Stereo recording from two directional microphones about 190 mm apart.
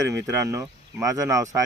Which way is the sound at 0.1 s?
15° right (ahead or behind).